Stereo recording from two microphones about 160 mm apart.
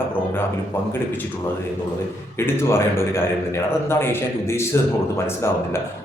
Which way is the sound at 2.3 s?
15° left (ahead or behind).